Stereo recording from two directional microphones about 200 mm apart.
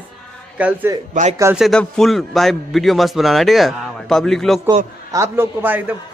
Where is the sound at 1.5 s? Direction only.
Centre (ahead or behind).